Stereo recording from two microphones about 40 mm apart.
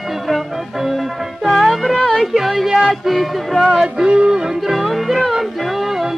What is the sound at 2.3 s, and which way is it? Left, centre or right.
Speech, centre.